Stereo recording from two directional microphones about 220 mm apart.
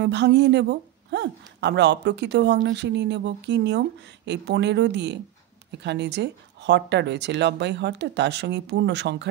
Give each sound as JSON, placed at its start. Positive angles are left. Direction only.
{"t": 0.0, "sound": "speech", "side_deg": -50}